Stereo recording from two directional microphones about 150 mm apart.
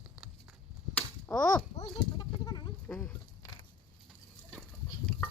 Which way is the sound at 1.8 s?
25° left (ahead or behind).